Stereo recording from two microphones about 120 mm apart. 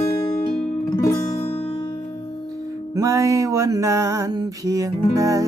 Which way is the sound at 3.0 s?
25° right (ahead or behind).